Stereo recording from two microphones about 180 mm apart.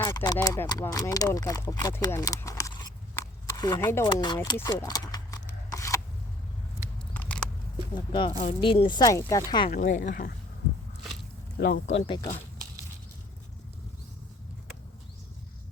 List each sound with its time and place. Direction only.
0.0 s speech: 20° left (ahead or behind)
4.1 s speech: 25° left (ahead or behind)
4.5 s a sound: 20° left (ahead or behind)
7.1 s scissors: 5° left (ahead or behind)
7.9 s speech: 25° left (ahead or behind)
8.3 s speech: 40° left (ahead or behind); by 9.6 s 20° left (ahead or behind)
9.6 s speech: 45° left (ahead or behind)
11.5 s speech: 60° left (ahead or behind)
11.9 s speech: 30° left (ahead or behind)